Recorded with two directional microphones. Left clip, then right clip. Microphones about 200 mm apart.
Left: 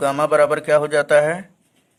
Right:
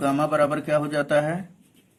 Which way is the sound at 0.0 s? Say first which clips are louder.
Left 6 dB; 50° left (ahead or behind).